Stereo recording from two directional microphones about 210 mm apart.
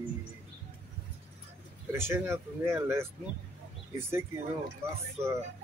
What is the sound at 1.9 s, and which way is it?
Speech, 10° right (ahead or behind).